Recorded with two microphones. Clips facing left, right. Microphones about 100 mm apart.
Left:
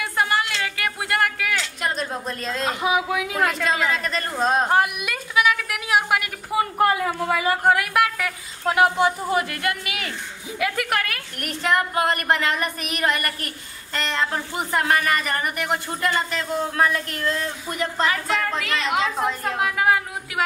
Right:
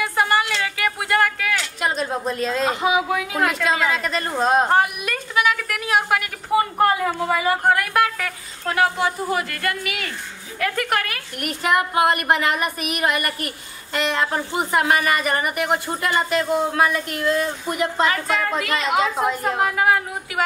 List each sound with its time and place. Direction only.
0.0 s a sound: centre (ahead or behind)
2.0 s a woman's voice: 5° right (ahead or behind)
7.6 s speech: 5° left (ahead or behind)
8.7 s speech: 20° left (ahead or behind)
10.6 s a woman's voice: 5° left (ahead or behind)